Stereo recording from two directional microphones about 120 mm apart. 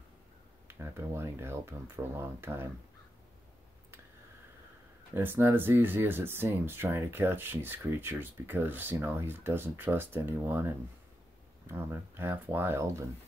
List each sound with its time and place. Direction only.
0.7 s speech: 20° right (ahead or behind)
5.1 s speech: 20° right (ahead or behind)
11.6 s speech: 20° right (ahead or behind)